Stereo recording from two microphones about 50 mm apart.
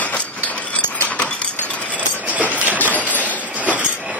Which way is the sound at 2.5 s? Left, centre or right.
Right.